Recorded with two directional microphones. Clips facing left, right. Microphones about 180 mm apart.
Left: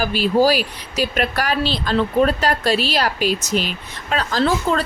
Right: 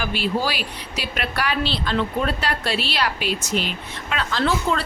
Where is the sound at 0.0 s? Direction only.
40° left (ahead or behind).